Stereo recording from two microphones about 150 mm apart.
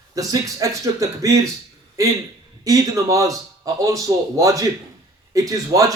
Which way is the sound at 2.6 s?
25° right (ahead or behind).